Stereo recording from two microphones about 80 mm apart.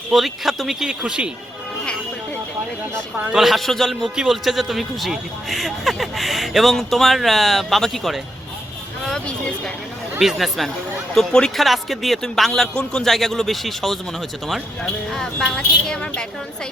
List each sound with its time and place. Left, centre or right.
0.1 s a man's voice: centre
3.3 s a man's voice: centre
15.1 s speech: centre